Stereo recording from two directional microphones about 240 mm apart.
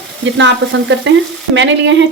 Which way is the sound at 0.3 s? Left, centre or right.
Right.